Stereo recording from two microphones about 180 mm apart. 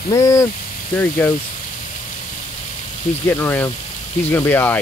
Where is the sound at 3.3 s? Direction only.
10° left (ahead or behind).